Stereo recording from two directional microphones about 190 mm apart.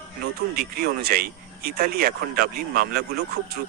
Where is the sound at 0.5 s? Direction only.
55° right (ahead or behind).